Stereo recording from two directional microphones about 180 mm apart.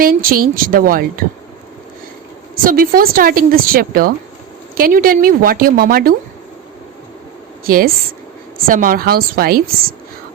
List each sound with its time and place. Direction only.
0.0 s a woman's voice: 50° right (ahead or behind)
2.6 s a woman's voice: 50° right (ahead or behind)
7.6 s a woman's voice: 55° right (ahead or behind)